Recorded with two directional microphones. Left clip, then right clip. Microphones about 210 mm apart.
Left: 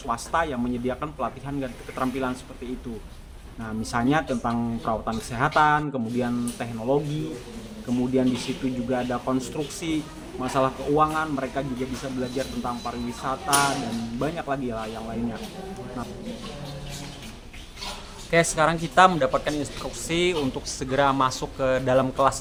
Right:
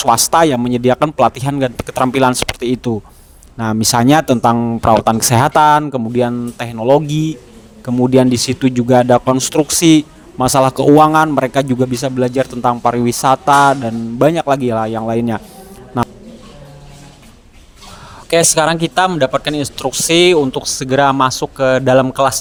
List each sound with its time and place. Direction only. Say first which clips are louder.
0.0 s speech: right 15 dB; 55° right (ahead or behind)
4.5 s speech: right 15 dB; 40° right (ahead or behind)
5.0 s speech: right 14 dB; 55° right (ahead or behind)
18.3 s speech: right 9 dB; 50° right (ahead or behind)